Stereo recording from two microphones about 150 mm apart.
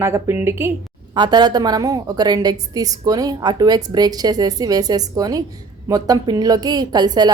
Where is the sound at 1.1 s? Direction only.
30° right (ahead or behind).